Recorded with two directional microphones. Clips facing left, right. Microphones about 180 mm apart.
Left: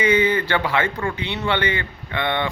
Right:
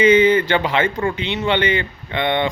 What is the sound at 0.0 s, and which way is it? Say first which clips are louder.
Speech: right 6 dB; 20° right (ahead or behind).